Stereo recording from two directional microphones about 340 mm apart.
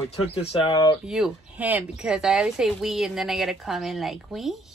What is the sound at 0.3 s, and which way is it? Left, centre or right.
Speech, centre.